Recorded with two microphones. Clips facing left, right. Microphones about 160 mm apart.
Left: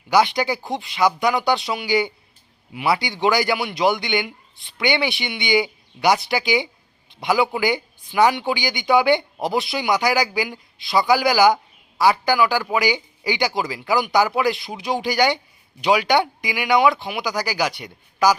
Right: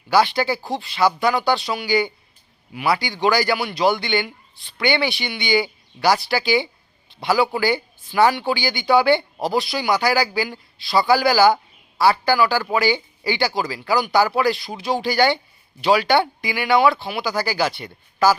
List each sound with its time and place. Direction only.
0.1 s a man's voice: 20° left (ahead or behind)